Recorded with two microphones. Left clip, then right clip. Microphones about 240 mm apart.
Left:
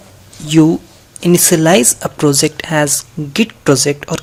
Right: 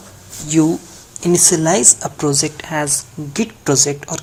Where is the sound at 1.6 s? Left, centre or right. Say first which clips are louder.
Left 4 dB; left.